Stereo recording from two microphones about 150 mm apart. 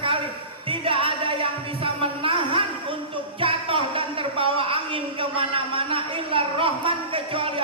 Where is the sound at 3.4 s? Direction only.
35° right (ahead or behind).